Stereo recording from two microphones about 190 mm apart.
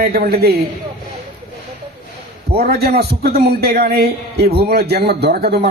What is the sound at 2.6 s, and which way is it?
A man's voice, 55° right (ahead or behind).